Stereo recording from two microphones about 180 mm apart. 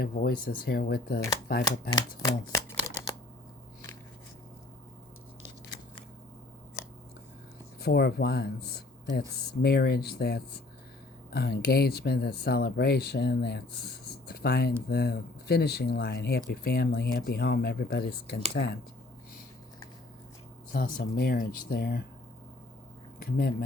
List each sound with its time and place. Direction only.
0.0 s speech: 55° left (ahead or behind)
1.9 s speech: 20° left (ahead or behind)
7.8 s speech: 65° left (ahead or behind)
20.7 s speech: 50° left (ahead or behind)
23.2 s speech: 55° left (ahead or behind)